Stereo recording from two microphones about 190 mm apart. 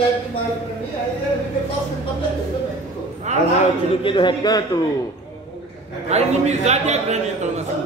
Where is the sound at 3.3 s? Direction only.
35° right (ahead or behind).